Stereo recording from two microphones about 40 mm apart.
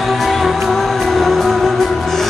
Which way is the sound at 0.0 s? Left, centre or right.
Centre.